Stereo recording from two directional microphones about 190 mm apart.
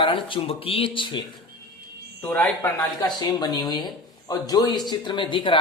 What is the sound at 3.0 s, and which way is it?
Speech, 20° left (ahead or behind).